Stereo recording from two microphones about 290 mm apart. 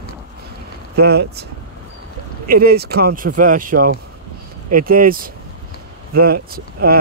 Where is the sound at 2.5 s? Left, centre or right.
Right.